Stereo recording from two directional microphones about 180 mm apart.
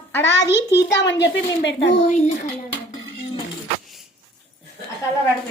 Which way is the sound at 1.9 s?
40° left (ahead or behind).